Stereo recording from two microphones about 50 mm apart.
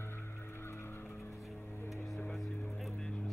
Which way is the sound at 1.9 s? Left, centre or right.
Centre.